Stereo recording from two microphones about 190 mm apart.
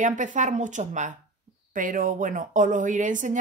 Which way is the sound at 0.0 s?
40° right (ahead or behind).